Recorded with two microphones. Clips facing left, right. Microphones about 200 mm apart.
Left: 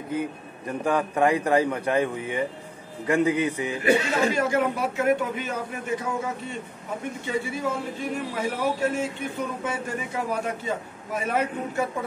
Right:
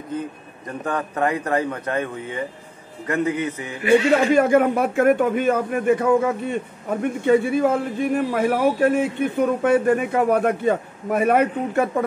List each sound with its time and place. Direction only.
0.7 s speech: 10° left (ahead or behind)
3.8 s a man's voice: 40° left (ahead or behind)
4.3 s a man's voice: 55° right (ahead or behind)